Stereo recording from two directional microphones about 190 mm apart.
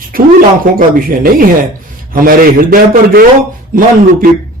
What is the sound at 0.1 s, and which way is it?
Speech, 50° right (ahead or behind).